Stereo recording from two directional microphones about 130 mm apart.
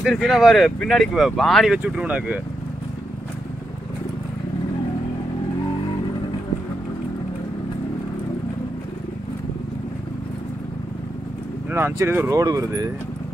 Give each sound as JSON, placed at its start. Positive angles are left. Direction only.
{"t": 0.0, "sound": "speech", "side_deg": 0}
{"t": 1.8, "sound": "speech", "side_deg": -10}
{"t": 11.7, "sound": "speech", "side_deg": -20}